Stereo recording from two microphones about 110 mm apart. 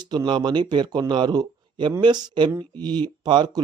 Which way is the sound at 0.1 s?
45° right (ahead or behind).